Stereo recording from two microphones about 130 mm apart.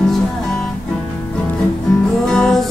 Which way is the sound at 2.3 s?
5° left (ahead or behind).